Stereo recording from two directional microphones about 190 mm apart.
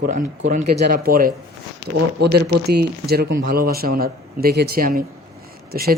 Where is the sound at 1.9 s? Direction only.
60° right (ahead or behind).